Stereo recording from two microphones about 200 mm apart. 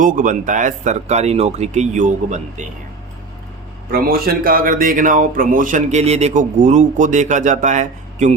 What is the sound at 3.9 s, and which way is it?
Speech, 50° right (ahead or behind).